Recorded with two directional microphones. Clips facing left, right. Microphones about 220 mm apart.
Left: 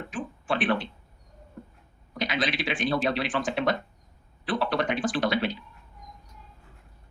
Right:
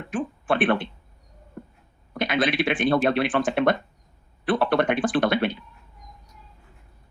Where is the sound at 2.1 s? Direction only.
55° right (ahead or behind).